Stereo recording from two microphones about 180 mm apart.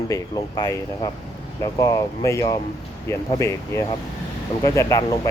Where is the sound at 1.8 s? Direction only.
15° left (ahead or behind).